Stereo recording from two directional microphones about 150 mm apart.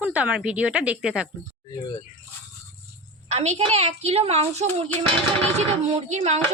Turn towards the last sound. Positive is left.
turn(degrees=-50)  # may be behind; listen again after turning